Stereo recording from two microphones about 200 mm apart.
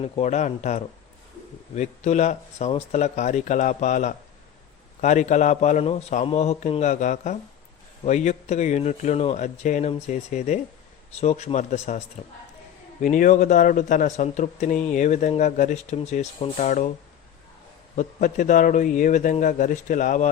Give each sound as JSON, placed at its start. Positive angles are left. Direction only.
{"t": 0.0, "sound": "speech", "side_deg": 35}
{"t": 17.9, "sound": "speech", "side_deg": 40}